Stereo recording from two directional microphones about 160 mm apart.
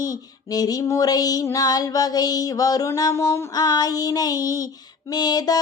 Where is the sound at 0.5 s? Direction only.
25° left (ahead or behind).